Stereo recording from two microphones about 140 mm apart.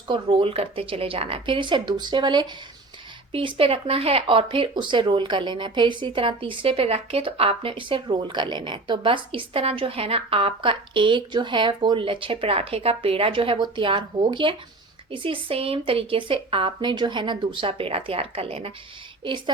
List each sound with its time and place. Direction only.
0.1 s speech: 35° right (ahead or behind)